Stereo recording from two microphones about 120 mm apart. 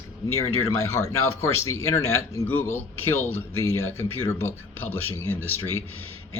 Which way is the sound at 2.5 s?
15° left (ahead or behind).